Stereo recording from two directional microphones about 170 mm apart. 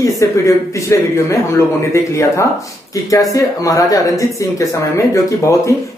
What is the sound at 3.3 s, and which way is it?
Speech, 20° left (ahead or behind).